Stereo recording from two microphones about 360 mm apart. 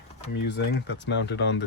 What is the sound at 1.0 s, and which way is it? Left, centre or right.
Speech, left.